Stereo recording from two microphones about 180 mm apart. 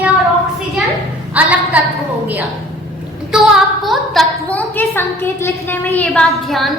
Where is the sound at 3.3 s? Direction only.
Centre (ahead or behind).